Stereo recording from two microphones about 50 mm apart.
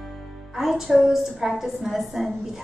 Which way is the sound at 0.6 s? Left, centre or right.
Centre.